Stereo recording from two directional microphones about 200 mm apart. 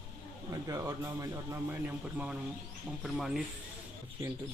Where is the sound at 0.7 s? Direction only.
15° right (ahead or behind).